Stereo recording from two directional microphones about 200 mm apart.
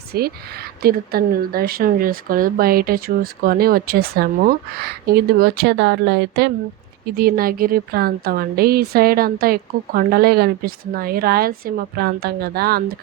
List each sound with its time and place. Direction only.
0.1 s a woman's voice: 50° right (ahead or behind)
7.2 s a woman's voice: 50° right (ahead or behind)